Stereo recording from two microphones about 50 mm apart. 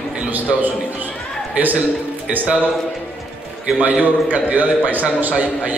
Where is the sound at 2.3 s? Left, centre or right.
Right.